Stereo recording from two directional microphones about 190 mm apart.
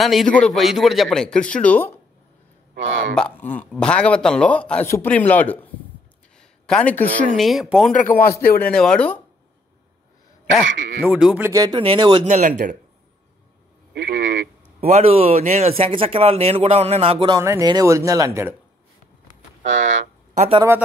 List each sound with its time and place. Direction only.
0.0 s speech: centre (ahead or behind)
3.2 s a man's voice: 5° left (ahead or behind)
6.3 s a sound: 5° left (ahead or behind)
7.3 s speech: centre (ahead or behind)
8.2 s a man's voice: 55° left (ahead or behind)
8.6 s speech: 5° left (ahead or behind)
11.0 s speech: 5° right (ahead or behind)
11.5 s speech: 25° right (ahead or behind)
12.3 s speech: 40° right (ahead or behind)
13.9 s speech: 65° right (ahead or behind)
14.9 s speech: 35° right (ahead or behind)
17.4 s speech: 15° right (ahead or behind)
19.6 s speech: 75° right (ahead or behind)
20.3 s a man's voice: 30° right (ahead or behind)